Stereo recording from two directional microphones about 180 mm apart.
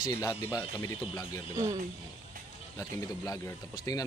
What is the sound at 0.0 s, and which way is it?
A man's voice, 20° left (ahead or behind).